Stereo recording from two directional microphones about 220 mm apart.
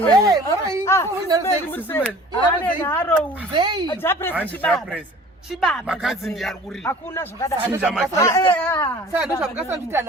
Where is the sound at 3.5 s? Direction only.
20° right (ahead or behind).